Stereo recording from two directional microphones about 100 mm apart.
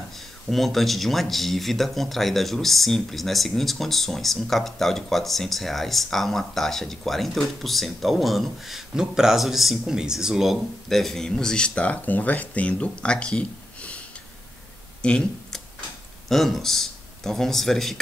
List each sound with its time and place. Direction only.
0.1 s speech: centre (ahead or behind)
15.0 s a sound: 10° left (ahead or behind)
16.3 s speech: centre (ahead or behind)